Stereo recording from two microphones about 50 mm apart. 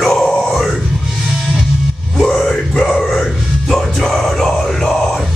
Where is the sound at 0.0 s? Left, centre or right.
Centre.